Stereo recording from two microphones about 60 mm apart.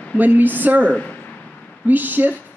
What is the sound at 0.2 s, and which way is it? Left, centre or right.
Speech, right.